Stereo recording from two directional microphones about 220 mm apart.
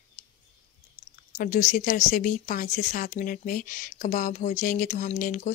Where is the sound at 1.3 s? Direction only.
35° left (ahead or behind).